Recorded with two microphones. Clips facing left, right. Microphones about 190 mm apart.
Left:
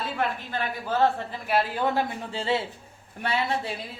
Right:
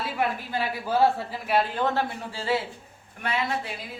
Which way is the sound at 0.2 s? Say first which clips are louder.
Right 2 dB; 10° right (ahead or behind).